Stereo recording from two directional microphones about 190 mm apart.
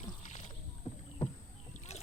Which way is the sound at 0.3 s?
40° left (ahead or behind).